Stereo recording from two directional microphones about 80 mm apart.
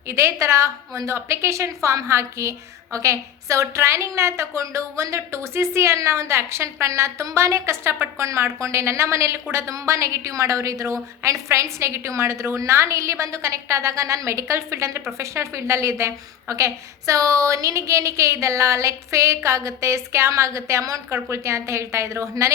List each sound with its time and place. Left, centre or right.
0.1 s a woman's voice: right